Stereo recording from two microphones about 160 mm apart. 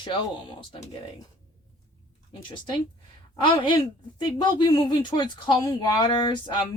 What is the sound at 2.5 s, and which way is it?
A woman's voice, 30° left (ahead or behind).